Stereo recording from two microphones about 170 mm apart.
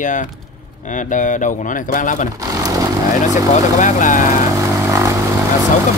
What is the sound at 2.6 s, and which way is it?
Speech, 20° right (ahead or behind).